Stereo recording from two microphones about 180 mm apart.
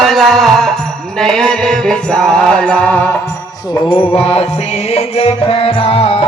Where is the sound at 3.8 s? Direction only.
30° left (ahead or behind).